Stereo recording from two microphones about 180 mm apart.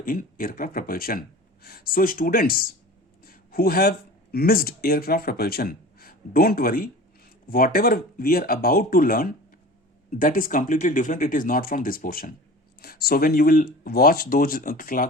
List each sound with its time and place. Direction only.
0.0 s speech: 50° left (ahead or behind)